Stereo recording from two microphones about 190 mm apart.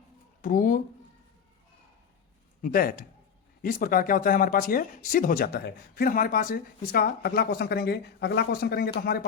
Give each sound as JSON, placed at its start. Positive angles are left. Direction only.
{"t": 0.4, "sound": "speech", "side_deg": 45}
{"t": 2.6, "sound": "speech", "side_deg": 45}